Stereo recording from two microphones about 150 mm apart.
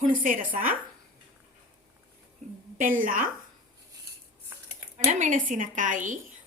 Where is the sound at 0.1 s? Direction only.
65° right (ahead or behind).